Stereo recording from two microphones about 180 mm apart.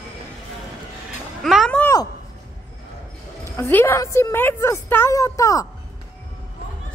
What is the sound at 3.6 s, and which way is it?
A woman's voice, 10° left (ahead or behind).